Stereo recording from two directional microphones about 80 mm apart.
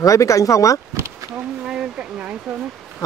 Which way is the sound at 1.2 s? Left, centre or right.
Right.